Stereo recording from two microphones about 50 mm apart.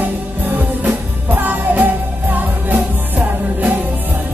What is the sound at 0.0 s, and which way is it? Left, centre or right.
Music, right.